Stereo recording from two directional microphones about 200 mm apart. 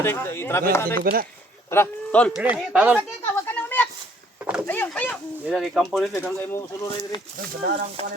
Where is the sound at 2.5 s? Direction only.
5° right (ahead or behind).